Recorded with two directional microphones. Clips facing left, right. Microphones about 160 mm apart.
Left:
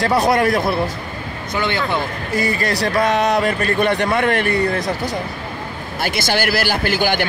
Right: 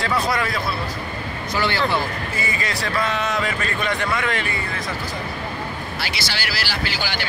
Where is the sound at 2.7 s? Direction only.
40° left (ahead or behind).